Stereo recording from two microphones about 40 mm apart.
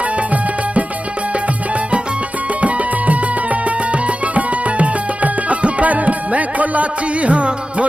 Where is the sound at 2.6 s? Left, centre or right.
Right.